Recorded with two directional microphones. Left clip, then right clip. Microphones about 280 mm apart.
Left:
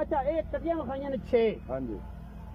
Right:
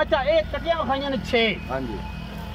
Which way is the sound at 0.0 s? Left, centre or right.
Left.